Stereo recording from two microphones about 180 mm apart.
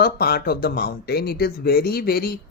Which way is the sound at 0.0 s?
60° left (ahead or behind).